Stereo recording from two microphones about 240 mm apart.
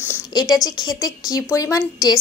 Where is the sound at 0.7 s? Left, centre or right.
Centre.